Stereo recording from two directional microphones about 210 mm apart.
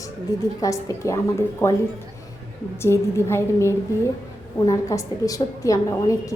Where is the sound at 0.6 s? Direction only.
15° left (ahead or behind).